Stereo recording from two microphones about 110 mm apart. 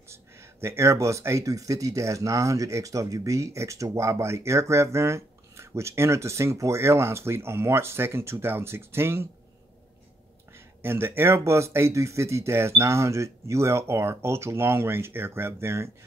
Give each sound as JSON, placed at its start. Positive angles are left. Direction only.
{"t": 0.1, "sound": "speech", "side_deg": -25}
{"t": 10.8, "sound": "speech", "side_deg": -20}